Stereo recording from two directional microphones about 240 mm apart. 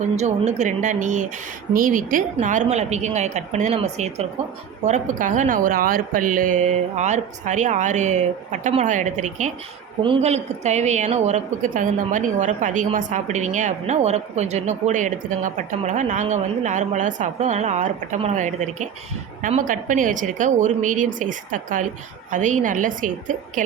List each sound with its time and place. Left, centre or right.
0.0 s a woman's voice: right